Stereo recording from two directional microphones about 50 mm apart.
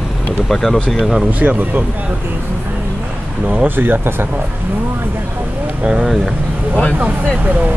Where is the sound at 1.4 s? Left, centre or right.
Right.